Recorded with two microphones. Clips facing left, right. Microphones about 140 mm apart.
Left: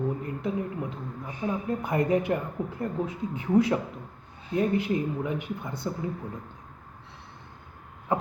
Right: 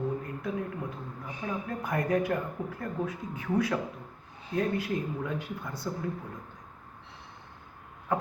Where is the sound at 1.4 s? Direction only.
25° left (ahead or behind).